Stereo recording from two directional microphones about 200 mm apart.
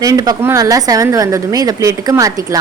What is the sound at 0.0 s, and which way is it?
A woman's voice, 20° right (ahead or behind).